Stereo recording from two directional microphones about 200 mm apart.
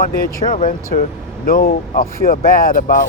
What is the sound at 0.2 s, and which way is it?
Speech, 45° left (ahead or behind).